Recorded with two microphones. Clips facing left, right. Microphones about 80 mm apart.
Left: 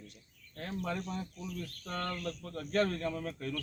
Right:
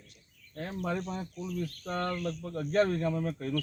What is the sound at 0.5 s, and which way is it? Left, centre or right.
Speech, right.